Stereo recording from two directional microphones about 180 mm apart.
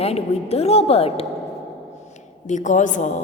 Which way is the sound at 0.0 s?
35° left (ahead or behind).